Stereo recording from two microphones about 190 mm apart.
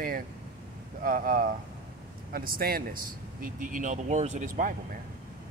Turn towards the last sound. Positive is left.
turn(degrees=-45)  # may be behind; listen again after turning